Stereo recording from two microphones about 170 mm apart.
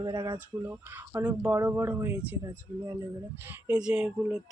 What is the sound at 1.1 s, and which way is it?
Speech, 10° right (ahead or behind).